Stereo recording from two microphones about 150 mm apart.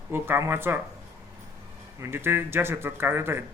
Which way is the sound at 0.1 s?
15° right (ahead or behind).